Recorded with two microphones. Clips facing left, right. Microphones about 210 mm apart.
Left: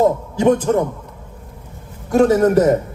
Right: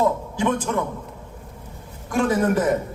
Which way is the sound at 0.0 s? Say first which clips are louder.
Left 7 dB; 40° left (ahead or behind).